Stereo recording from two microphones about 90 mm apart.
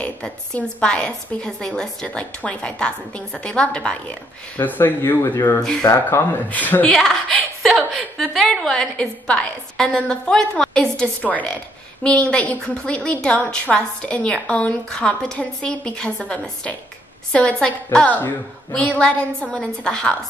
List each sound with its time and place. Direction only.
0.0 s a woman's voice: 10° left (ahead or behind)
4.6 s speech: 20° left (ahead or behind)
6.9 s a woman's voice: 5° left (ahead or behind)